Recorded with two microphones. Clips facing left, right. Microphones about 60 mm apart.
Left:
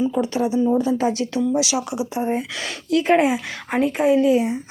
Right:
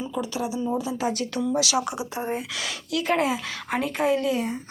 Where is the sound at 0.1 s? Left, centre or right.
Left.